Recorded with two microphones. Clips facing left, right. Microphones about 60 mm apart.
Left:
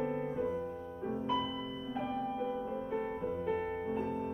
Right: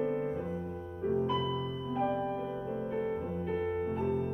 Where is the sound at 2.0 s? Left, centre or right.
Right.